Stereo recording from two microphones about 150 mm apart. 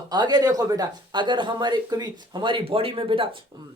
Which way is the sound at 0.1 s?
30° right (ahead or behind).